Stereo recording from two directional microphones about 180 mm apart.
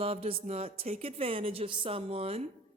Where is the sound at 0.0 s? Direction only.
35° right (ahead or behind).